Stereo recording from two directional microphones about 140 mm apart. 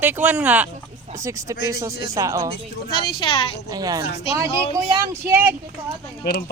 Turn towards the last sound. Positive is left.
turn(degrees=90)